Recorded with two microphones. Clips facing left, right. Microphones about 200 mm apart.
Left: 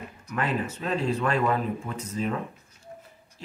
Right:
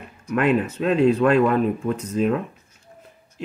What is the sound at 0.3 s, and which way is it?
Speech, 60° right (ahead or behind).